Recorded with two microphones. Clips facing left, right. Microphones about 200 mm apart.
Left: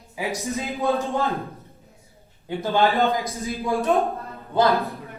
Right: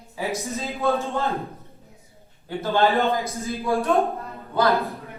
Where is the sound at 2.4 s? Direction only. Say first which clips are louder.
Even; 15° left (ahead or behind).